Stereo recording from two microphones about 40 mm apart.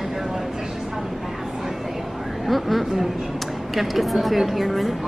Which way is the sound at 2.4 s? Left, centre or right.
Centre.